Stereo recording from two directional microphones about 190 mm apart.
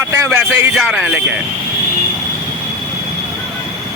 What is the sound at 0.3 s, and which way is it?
Speech, 10° right (ahead or behind).